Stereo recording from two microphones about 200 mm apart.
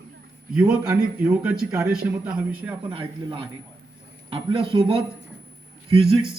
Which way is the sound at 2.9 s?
25° right (ahead or behind).